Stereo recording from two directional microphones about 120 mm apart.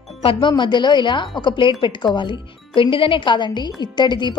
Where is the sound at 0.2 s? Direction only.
45° left (ahead or behind).